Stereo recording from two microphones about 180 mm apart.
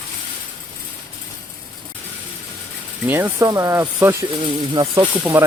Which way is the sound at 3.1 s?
10° right (ahead or behind).